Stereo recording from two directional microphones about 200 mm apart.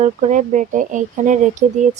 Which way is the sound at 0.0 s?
35° right (ahead or behind).